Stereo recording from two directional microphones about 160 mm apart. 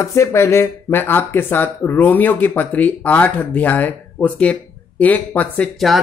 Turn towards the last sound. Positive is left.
turn(degrees=0)  # may be behind; listen again after turning